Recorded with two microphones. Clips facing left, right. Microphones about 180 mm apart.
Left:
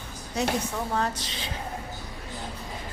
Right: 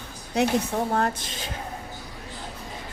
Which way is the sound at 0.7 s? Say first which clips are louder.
Right 4 dB; 50° right (ahead or behind).